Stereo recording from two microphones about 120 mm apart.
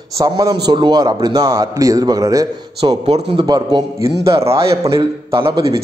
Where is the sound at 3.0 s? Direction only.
55° right (ahead or behind).